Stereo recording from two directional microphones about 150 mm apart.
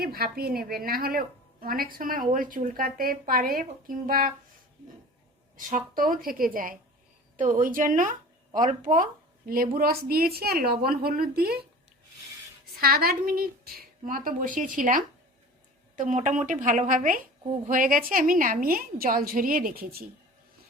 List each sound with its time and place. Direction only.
0.0 s a woman's voice: 90° right; by 4.3 s 70° right (ahead or behind)
5.5 s a woman's voice: 65° right (ahead or behind)
9.5 s a woman's voice: 80° right
12.8 s a woman's voice: 85° right
14.0 s a woman's voice: 65° right (ahead or behind)